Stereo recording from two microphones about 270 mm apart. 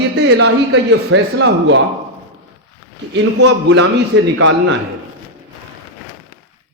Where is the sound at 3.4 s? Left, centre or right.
Right.